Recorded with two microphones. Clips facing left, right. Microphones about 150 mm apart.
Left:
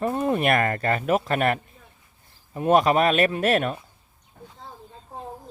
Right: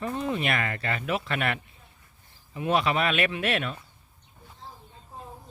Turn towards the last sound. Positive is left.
turn(degrees=45)  # may be behind; listen again after turning